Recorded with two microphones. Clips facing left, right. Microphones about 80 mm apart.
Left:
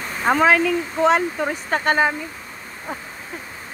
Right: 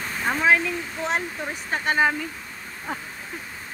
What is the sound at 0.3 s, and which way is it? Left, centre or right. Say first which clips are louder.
Speech: left 5 dB; left.